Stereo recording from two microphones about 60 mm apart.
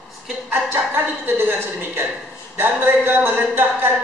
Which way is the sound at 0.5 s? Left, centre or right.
Right.